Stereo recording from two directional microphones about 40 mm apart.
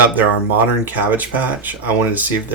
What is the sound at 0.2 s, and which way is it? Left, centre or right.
Speech, right.